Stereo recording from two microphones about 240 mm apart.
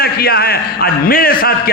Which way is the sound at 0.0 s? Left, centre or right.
Left.